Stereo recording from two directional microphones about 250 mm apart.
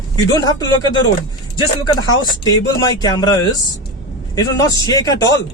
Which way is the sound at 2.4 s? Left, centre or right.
Centre.